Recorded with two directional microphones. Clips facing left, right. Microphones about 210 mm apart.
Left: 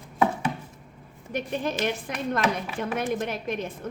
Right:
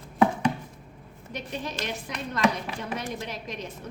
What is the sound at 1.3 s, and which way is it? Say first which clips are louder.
A woman's voice: left 6 dB; 55° left (ahead or behind).